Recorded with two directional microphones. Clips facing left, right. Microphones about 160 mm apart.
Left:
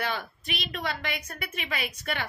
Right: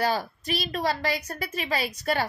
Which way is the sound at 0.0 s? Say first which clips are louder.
Right 6 dB; 35° right (ahead or behind).